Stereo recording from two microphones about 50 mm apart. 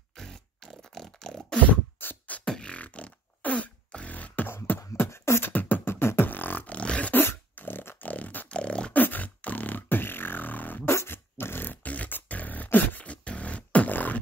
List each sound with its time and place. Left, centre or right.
0.1 s beatboxing: centre
2.0 s beatboxing: left
2.4 s beatboxing: centre
2.7 s beatboxing: left
4.6 s beatboxing: left
5.1 s beatboxing: left
5.5 s beatboxing: left
5.9 s beatboxing: left
7.2 s beatboxing: left
8.5 s beatboxing: left
8.9 s beatboxing: left
10.9 s beatboxing: left